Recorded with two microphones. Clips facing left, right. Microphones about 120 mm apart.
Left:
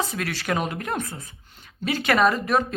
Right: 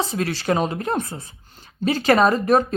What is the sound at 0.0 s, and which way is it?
Speech, 30° right (ahead or behind).